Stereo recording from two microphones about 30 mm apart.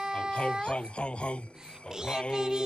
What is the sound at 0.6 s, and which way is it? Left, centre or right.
Speech, left.